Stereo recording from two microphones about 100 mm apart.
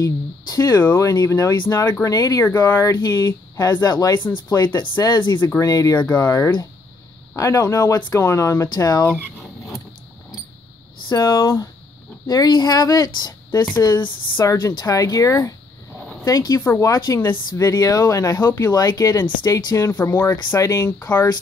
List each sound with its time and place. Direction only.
0.0 s speech: 40° left (ahead or behind)
2.4 s speech: 20° left (ahead or behind)
3.0 s speech: 45° left (ahead or behind)
5.6 s speech: 35° left (ahead or behind)
8.2 s speech: 30° left (ahead or behind)
8.6 s speech: 40° left (ahead or behind)
11.1 s speech: 35° left (ahead or behind)
19.9 s speech: 20° left (ahead or behind)
20.4 s speech: 35° left (ahead or behind)